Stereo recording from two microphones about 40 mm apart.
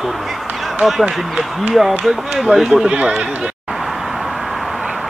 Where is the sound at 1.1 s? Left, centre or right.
Centre.